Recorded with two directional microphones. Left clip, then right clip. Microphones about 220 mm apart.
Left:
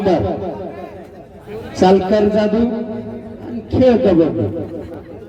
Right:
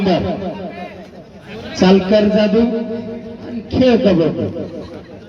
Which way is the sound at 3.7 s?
35° right (ahead or behind).